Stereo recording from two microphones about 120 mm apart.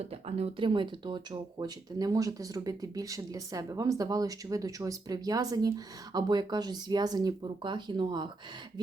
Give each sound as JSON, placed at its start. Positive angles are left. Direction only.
{"t": 0.0, "sound": "speech", "side_deg": -60}
{"t": 0.6, "sound": "speech", "side_deg": -40}